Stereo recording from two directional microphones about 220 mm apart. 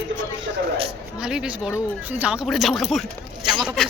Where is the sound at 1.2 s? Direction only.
5° right (ahead or behind).